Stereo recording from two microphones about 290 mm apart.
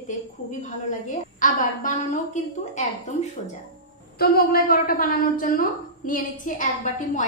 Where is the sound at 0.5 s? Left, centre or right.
Left.